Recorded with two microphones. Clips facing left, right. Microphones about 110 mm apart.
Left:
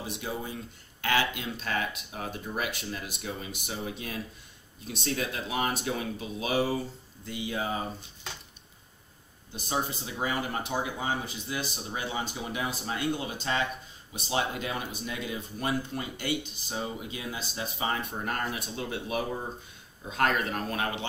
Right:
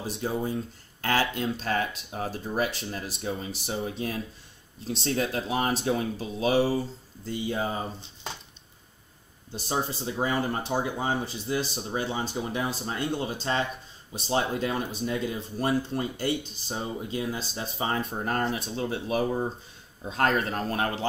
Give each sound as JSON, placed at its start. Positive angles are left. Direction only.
{"t": 0.0, "sound": "speech", "side_deg": -35}
{"t": 9.6, "sound": "speech", "side_deg": -30}